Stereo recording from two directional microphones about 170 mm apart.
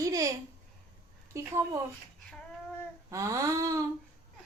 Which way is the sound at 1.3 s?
15° right (ahead or behind).